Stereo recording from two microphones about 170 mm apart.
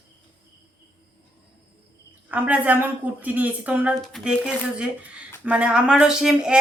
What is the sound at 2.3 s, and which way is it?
A woman's voice, 10° right (ahead or behind).